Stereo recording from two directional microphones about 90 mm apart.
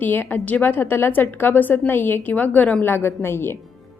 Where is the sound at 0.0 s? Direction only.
20° left (ahead or behind).